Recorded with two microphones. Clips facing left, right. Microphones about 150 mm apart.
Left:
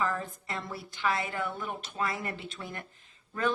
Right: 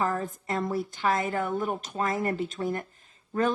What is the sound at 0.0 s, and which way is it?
Speech, 45° right (ahead or behind).